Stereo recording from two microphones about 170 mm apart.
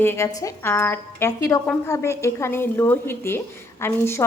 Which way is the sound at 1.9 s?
15° left (ahead or behind).